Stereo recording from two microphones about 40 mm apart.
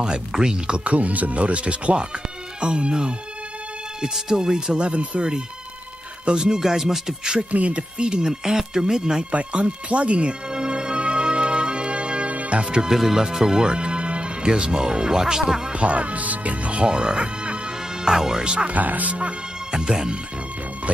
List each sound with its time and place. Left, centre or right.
0.0 s speech: centre
0.7 s speech: right; by 4.7 s centre
4.7 s speech: right; by 7.3 s centre
7.5 s speech: right
8.0 s speech: right
9.3 s speech: right
10.5 s music: right
12.8 s speech: centre
15.7 s speech: right
16.8 s music: right
18.4 s speech: right
18.7 s speech: right
19.7 s speech: centre